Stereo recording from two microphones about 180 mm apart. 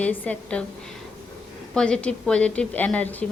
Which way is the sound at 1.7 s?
5° left (ahead or behind).